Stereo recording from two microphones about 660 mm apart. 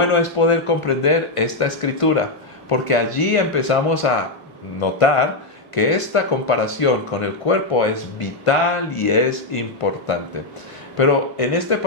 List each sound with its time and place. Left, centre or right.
0.0 s speech: left
10.9 s speech: left